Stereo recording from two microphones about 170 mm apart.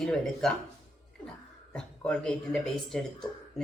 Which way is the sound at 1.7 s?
5° left (ahead or behind).